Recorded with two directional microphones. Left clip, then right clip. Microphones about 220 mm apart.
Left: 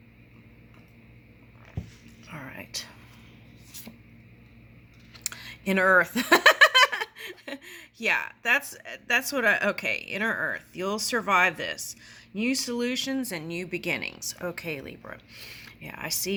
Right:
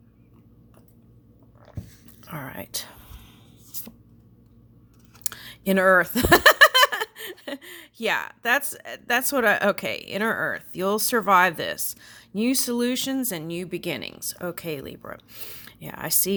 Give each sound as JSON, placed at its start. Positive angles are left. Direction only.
{"t": 2.2, "sound": "whispering", "side_deg": -45}
{"t": 5.2, "sound": "speech", "side_deg": -30}